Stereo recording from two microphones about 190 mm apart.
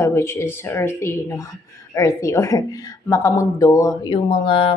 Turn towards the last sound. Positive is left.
turn(degrees=30)  # may be behind; listen again after turning